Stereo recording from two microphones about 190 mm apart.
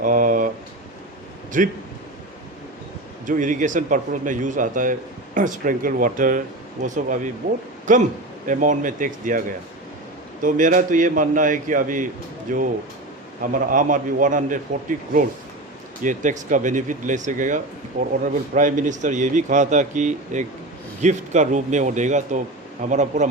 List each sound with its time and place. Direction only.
0.0 s a sound: 45° right (ahead or behind)
1.5 s speech: 45° right (ahead or behind)
3.2 s a man's voice: 45° right (ahead or behind)
8.4 s a man's voice: 45° right (ahead or behind)